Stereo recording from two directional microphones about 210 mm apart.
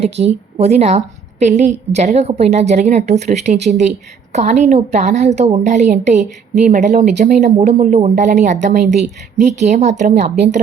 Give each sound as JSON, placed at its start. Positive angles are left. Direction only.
{"t": 0.0, "sound": "a woman's voice", "side_deg": -30}